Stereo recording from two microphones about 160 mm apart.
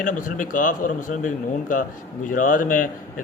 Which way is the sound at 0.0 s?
55° left (ahead or behind).